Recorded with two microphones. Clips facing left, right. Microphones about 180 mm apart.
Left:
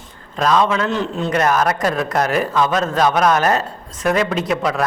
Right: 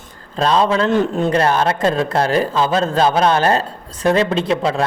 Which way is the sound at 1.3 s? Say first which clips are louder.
Left 3 dB; 30° right (ahead or behind).